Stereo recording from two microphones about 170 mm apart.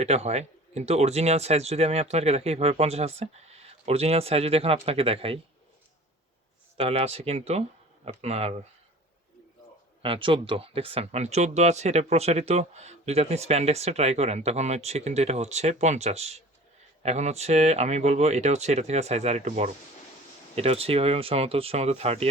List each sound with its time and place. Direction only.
0.0 s speech: 40° right (ahead or behind)
6.7 s speech: 35° right (ahead or behind)
10.0 s speech: 30° right (ahead or behind)